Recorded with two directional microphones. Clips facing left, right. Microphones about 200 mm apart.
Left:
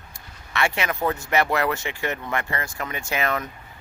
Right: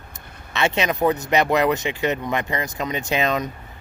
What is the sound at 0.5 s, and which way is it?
Speech, 20° right (ahead or behind).